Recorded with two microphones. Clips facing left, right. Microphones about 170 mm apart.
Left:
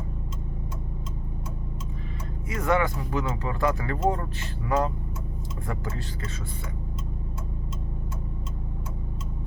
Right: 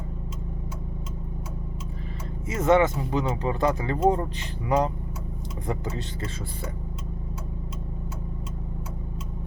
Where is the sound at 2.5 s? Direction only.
20° right (ahead or behind).